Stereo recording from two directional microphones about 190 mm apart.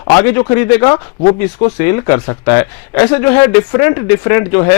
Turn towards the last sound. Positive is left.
turn(degrees=20)  # may be behind; listen again after turning